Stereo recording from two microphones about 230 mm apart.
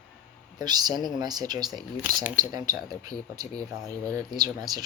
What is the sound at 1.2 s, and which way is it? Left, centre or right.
Speech, centre.